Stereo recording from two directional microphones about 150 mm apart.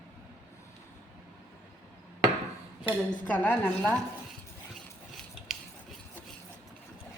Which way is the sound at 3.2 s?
10° left (ahead or behind).